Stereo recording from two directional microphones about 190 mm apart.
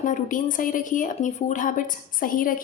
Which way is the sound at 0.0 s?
45° left (ahead or behind).